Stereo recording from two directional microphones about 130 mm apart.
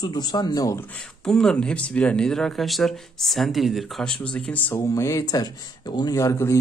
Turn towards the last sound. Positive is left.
turn(degrees=20)  # may be behind; listen again after turning